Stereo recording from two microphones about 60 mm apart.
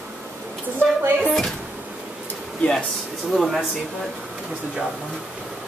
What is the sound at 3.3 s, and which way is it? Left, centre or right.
Speech, centre.